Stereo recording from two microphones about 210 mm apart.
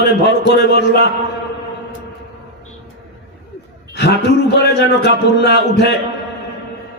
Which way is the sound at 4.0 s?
55° left (ahead or behind).